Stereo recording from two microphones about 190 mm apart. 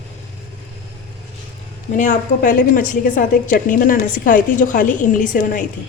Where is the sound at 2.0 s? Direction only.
40° left (ahead or behind).